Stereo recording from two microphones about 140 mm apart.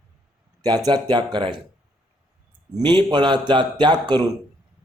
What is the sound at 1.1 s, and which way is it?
Speech, 35° right (ahead or behind).